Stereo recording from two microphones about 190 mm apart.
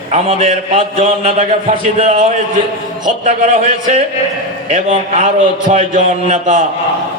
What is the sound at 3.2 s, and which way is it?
A man's voice, 35° right (ahead or behind).